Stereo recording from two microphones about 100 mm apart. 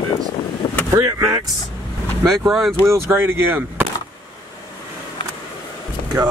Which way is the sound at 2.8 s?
25° right (ahead or behind).